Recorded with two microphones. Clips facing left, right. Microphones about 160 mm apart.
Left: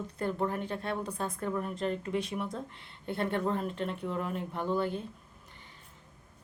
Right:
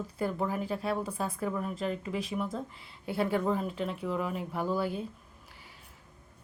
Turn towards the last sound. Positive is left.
turn(degrees=-5)  # may be behind; listen again after turning